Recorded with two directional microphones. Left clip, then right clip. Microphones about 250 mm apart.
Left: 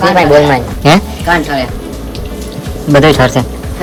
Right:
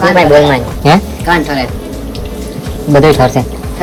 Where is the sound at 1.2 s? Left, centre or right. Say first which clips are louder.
Even; centre.